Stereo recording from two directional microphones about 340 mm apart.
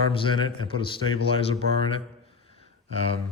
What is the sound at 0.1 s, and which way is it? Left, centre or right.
Speech, centre.